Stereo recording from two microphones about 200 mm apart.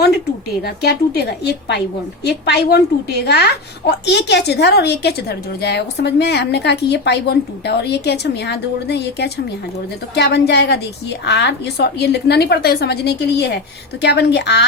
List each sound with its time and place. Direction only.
0.6 s a woman's voice: 55° left (ahead or behind)